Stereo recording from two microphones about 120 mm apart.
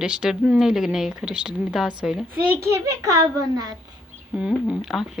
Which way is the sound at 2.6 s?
25° right (ahead or behind).